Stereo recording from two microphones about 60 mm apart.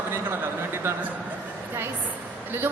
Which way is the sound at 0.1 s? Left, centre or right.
Right.